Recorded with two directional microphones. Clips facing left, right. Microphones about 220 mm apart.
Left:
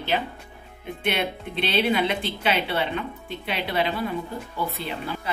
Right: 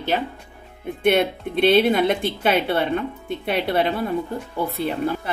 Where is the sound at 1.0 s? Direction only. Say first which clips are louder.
Right 8 dB; 50° right (ahead or behind).